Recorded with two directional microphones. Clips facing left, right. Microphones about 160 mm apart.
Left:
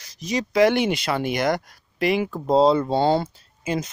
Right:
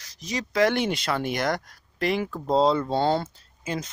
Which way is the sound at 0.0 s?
15° left (ahead or behind).